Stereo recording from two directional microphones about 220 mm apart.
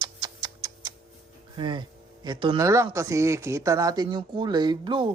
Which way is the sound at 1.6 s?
20° right (ahead or behind).